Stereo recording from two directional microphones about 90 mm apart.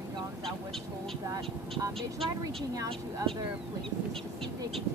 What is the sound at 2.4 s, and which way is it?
Speech, 45° right (ahead or behind).